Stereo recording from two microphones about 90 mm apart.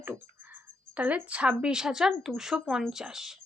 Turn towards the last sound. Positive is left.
turn(degrees=-5)  # may be behind; listen again after turning